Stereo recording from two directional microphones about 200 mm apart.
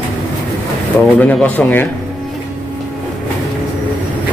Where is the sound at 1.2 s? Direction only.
10° left (ahead or behind).